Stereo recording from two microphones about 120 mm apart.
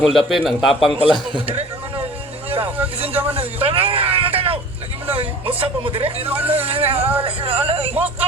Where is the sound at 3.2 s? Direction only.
50° right (ahead or behind).